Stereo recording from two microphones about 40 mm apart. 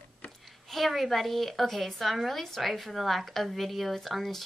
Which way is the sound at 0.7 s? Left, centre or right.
Centre.